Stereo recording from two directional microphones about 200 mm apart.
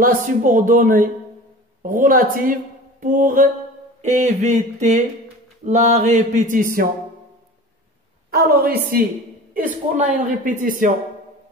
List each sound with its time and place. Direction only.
0.0 s a woman's voice: 40° right (ahead or behind)
4.0 s a sound: 35° right (ahead or behind)
8.3 s a woman's voice: 50° right (ahead or behind)